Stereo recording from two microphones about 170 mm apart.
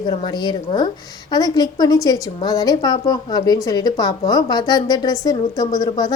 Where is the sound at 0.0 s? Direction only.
30° left (ahead or behind).